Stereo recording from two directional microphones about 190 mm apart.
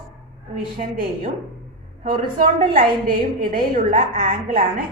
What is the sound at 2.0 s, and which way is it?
A woman's voice, 45° right (ahead or behind).